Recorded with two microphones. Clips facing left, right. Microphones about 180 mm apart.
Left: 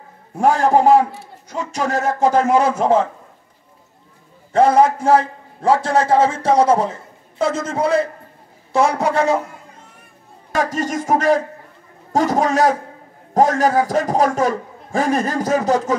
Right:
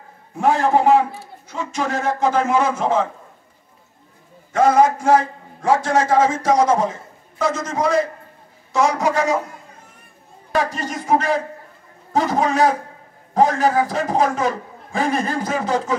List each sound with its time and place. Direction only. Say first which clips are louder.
0.4 s a man's voice: left 2 dB; 40° left (ahead or behind)
4.5 s a man's voice: left 2 dB; 30° left (ahead or behind)
10.5 s a man's voice: left 2 dB; 45° left (ahead or behind)